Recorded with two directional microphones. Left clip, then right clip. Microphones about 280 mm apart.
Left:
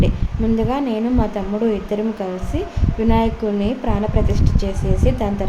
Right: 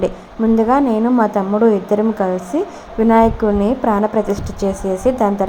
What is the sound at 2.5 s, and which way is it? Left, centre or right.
A woman's voice, centre.